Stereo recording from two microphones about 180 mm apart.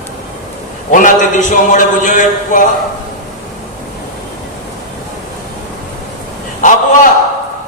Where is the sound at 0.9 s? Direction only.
45° left (ahead or behind).